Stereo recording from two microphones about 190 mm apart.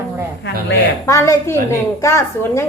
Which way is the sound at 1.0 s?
15° left (ahead or behind).